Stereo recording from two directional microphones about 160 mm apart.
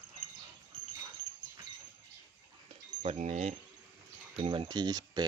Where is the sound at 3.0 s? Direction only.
45° right (ahead or behind).